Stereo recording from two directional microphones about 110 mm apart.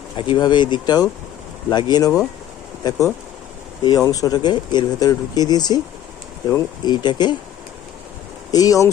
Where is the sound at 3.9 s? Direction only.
30° left (ahead or behind).